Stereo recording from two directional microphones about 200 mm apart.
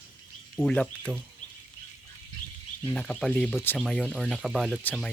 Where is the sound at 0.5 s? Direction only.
5° left (ahead or behind).